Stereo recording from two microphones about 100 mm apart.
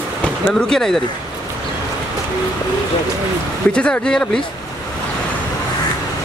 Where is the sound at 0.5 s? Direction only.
5° left (ahead or behind).